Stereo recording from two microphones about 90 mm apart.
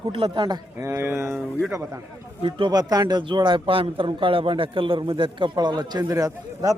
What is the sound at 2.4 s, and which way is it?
A man's voice, 65° right (ahead or behind).